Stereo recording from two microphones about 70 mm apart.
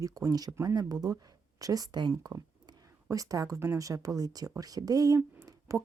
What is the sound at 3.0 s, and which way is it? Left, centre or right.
Speech, right.